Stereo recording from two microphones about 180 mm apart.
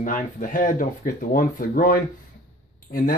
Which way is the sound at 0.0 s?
45° left (ahead or behind).